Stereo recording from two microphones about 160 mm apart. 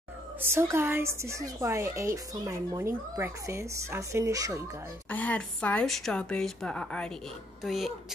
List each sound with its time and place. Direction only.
0.4 s speech: 15° right (ahead or behind)
5.1 s speech: 10° left (ahead or behind)